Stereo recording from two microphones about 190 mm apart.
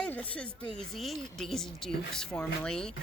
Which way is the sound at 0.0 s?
5° left (ahead or behind).